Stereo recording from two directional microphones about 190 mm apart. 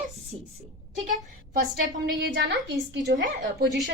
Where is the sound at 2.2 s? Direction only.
65° right (ahead or behind).